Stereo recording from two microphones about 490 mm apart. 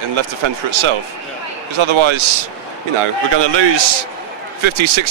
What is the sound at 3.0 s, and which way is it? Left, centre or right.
A man's voice, right.